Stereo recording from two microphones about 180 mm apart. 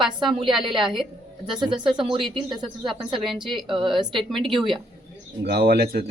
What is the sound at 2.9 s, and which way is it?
Speech, 25° right (ahead or behind).